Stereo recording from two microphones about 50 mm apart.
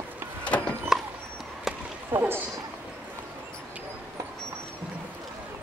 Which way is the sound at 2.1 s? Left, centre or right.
Right.